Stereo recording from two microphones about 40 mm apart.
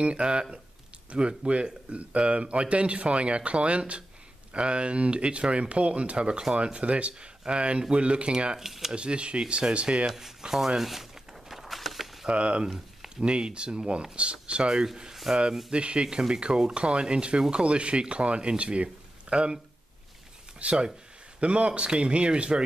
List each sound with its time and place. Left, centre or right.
0.0 s speech: right
8.5 s speech: centre
8.9 s speech: right
10.0 s speech: centre
10.8 s a sound: centre
12.3 s speech: right
15.3 s speech: centre
15.7 s speech: right
20.6 s speech: right